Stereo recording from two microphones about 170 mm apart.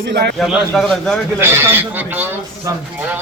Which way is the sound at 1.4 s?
15° right (ahead or behind).